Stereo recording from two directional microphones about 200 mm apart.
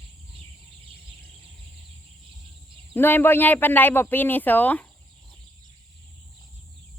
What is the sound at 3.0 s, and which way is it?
Speech, 10° left (ahead or behind).